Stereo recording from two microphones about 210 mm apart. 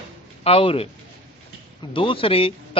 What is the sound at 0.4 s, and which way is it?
Speech, 25° left (ahead or behind).